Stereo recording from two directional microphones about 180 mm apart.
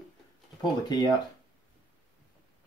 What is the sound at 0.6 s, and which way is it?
Speech, 25° left (ahead or behind).